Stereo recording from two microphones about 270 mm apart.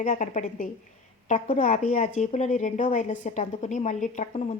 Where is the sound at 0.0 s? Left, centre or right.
Left.